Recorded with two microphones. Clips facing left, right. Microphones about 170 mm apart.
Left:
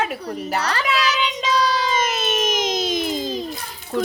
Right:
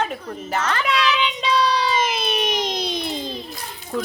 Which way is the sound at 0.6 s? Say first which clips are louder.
Right 1 dB; 35° left (ahead or behind).